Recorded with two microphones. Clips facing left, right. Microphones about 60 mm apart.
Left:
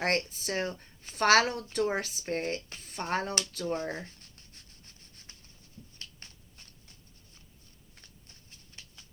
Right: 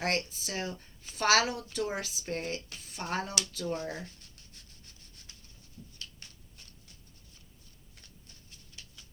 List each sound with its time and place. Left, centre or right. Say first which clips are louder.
0.0 s speech: left 2 dB; left
4.5 s rub: even; left
6.0 s shuffling cards: left 1 dB; left
8.3 s a sound: even; left